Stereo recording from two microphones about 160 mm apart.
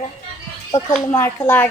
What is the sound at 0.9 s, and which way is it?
Speech, 15° left (ahead or behind).